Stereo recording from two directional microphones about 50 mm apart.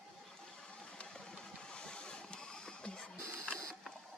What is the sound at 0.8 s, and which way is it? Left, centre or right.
Vehicle, centre.